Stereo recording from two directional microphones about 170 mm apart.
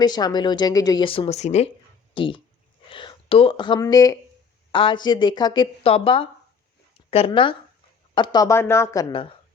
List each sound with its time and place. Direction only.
0.0 s speech: 25° left (ahead or behind); by 1.7 s 40° left (ahead or behind)
2.1 s speech: 30° left (ahead or behind)